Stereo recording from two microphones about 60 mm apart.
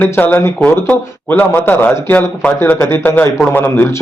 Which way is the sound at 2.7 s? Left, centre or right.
Left.